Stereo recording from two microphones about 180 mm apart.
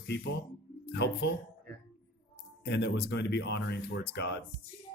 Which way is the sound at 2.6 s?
70° left (ahead or behind).